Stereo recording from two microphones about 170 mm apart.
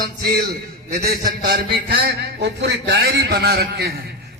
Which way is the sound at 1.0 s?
65° right (ahead or behind).